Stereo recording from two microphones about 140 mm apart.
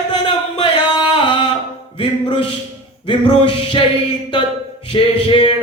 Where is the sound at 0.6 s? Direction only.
35° left (ahead or behind).